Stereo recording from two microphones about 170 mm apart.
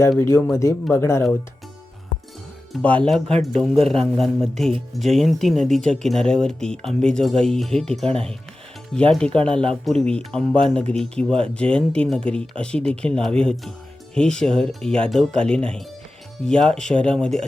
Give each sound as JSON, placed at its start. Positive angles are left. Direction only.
{"t": 0.2, "sound": "speech", "side_deg": 15}
{"t": 2.7, "sound": "speech", "side_deg": 5}
{"t": 9.0, "sound": "speech", "side_deg": 5}